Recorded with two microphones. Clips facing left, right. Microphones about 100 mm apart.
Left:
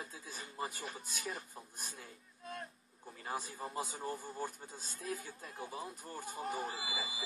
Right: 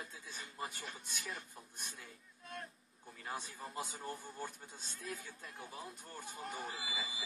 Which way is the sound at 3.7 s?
5° left (ahead or behind).